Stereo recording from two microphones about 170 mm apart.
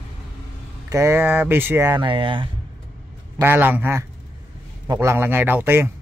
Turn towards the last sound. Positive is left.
turn(degrees=-10)  # may be behind; listen again after turning